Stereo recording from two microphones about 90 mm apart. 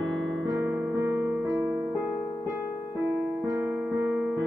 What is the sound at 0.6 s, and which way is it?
Music, 25° right (ahead or behind).